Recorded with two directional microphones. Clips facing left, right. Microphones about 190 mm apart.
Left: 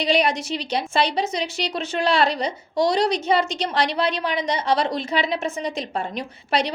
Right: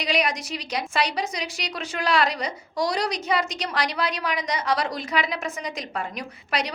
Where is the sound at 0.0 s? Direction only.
30° left (ahead or behind).